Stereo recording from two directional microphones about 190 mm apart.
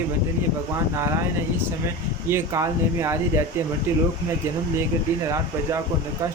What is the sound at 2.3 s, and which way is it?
Speech, 15° right (ahead or behind).